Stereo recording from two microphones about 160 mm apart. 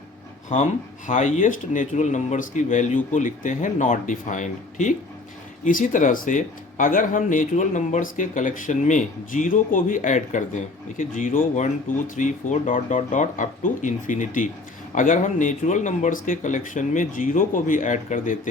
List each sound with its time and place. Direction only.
0.5 s speech: 50° left (ahead or behind)